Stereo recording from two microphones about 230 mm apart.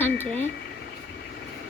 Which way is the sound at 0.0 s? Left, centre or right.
Centre.